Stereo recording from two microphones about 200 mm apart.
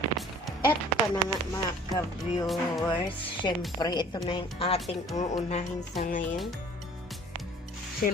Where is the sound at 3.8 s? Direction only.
20° left (ahead or behind); by 6.3 s 40° left (ahead or behind).